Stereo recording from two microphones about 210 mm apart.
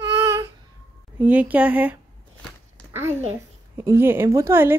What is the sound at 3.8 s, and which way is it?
Speech, 10° right (ahead or behind).